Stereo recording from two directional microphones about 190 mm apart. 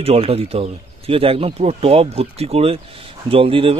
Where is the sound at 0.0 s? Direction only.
30° right (ahead or behind).